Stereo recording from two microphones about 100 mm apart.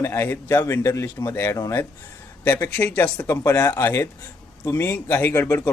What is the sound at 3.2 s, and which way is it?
Speech, 30° left (ahead or behind).